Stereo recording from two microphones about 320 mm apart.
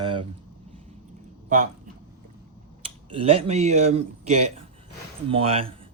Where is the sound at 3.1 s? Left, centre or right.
Centre.